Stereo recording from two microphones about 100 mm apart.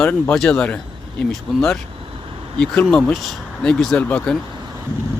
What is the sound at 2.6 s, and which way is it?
Speech, 5° left (ahead or behind).